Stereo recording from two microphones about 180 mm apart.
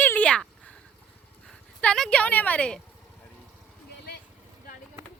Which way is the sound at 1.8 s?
5° left (ahead or behind).